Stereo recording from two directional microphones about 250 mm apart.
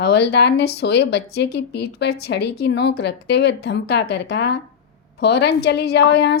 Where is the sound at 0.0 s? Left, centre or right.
Left.